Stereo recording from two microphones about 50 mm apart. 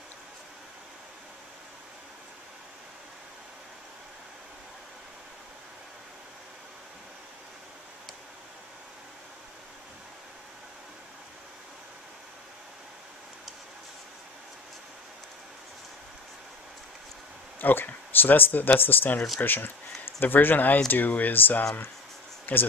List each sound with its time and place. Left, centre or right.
17.6 s speech: left